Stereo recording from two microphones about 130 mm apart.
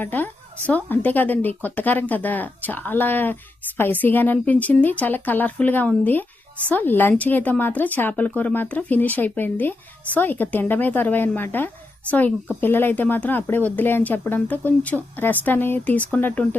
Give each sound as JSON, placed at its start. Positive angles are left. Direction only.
{"t": 0.0, "sound": "speech", "side_deg": 15}